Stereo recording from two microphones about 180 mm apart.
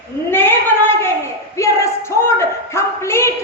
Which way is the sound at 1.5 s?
15° left (ahead or behind).